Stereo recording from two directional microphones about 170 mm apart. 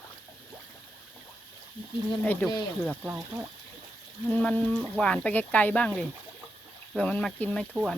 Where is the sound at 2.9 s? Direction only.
10° right (ahead or behind).